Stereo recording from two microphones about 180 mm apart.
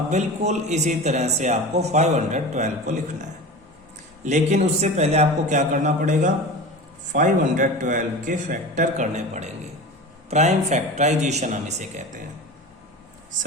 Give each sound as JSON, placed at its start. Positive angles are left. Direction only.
{"t": 0.1, "sound": "a man's voice", "side_deg": -40}